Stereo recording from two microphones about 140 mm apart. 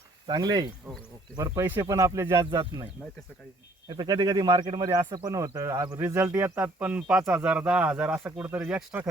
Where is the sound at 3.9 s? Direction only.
30° right (ahead or behind).